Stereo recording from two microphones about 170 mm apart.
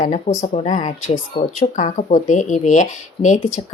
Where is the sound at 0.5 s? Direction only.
45° left (ahead or behind).